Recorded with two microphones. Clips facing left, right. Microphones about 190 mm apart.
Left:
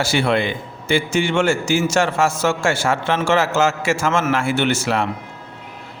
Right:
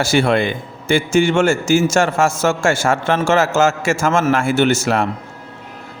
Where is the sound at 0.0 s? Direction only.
45° right (ahead or behind).